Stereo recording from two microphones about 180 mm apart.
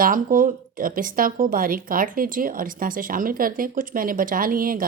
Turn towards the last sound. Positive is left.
turn(degrees=-50)  # may be behind; listen again after turning